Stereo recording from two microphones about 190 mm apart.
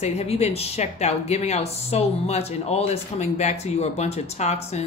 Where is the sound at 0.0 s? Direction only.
35° left (ahead or behind).